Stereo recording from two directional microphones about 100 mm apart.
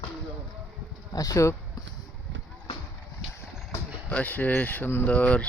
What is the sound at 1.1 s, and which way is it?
Speech, 40° left (ahead or behind).